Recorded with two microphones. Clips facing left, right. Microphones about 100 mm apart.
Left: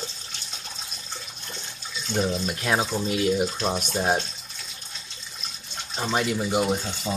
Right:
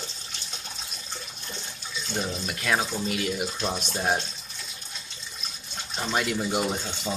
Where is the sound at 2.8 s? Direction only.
25° left (ahead or behind).